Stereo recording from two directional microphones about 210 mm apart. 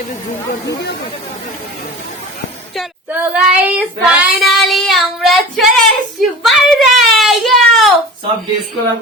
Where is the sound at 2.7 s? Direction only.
5° right (ahead or behind).